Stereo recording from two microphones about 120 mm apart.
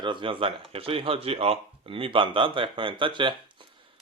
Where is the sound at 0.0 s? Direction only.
45° right (ahead or behind).